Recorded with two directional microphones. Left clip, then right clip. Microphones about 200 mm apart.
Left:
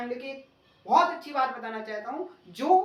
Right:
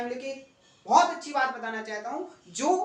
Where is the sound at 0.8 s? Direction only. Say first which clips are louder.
Right 1 dB; 5° right (ahead or behind).